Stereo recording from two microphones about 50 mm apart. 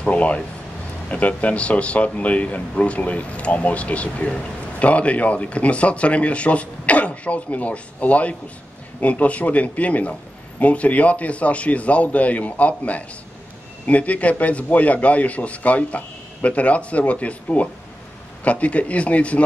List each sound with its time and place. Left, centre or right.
0.0 s speech: left